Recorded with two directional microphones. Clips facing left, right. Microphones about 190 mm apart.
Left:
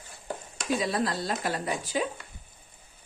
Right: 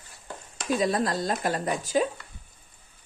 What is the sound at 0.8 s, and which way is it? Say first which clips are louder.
A woman's voice: right 3 dB; 45° right (ahead or behind).